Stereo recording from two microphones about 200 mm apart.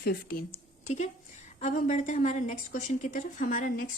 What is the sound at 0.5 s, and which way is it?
A woman's voice, 35° left (ahead or behind).